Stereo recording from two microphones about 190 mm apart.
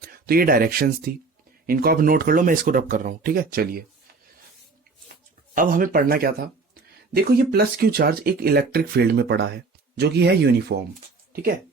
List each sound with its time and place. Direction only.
0.0 s speech: 50° right (ahead or behind)
5.5 s speech: 45° right (ahead or behind)